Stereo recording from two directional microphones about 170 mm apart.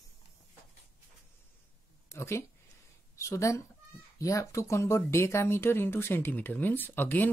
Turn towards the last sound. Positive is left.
turn(degrees=10)  # may be behind; listen again after turning